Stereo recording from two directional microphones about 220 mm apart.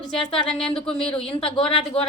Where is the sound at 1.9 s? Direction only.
25° left (ahead or behind).